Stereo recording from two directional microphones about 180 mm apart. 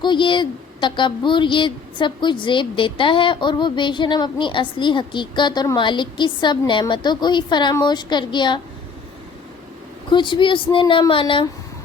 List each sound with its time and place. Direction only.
0.0 s a woman's voice: 25° left (ahead or behind)
10.1 s a woman's voice: 25° left (ahead or behind)